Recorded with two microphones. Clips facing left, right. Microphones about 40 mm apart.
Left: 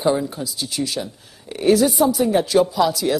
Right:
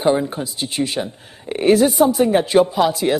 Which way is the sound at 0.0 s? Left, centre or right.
Right.